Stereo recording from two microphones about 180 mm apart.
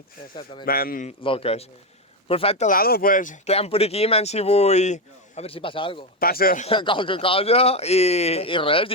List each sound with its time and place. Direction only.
0.6 s a man's voice: 55° left (ahead or behind)
1.2 s speech: 30° left (ahead or behind)
2.6 s speech: 55° left (ahead or behind); by 6.1 s 30° left (ahead or behind)
6.1 s a man's voice: 55° left (ahead or behind)
6.7 s speech: 30° left (ahead or behind)